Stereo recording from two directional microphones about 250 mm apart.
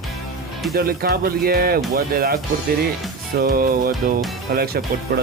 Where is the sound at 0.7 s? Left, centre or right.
Right.